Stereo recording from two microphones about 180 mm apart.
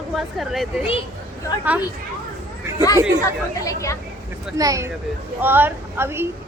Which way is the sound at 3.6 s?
15° left (ahead or behind).